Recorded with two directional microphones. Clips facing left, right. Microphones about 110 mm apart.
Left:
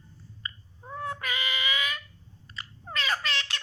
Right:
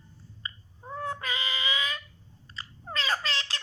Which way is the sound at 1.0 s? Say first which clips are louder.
Left 1 dB; 30° right (ahead or behind).